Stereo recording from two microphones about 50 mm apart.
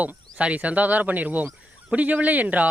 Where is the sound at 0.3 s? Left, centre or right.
Right.